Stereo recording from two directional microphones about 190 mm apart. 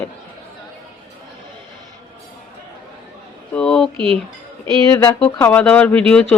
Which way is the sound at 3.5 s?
5° left (ahead or behind).